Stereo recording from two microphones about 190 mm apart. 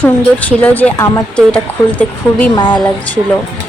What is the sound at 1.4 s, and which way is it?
Speech, 5° left (ahead or behind).